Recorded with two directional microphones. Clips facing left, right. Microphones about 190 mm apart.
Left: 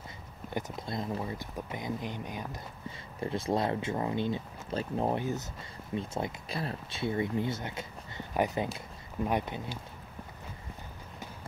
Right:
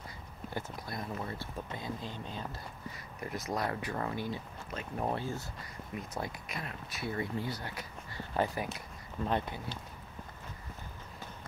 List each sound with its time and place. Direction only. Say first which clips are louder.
0.7 s speech: left 4 dB; 25° left (ahead or behind)
3.2 s speech: left 6 dB; 30° left (ahead or behind); by 9.8 s 15° left (ahead or behind)